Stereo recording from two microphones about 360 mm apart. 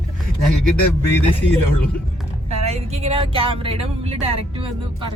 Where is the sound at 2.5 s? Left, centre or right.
Centre.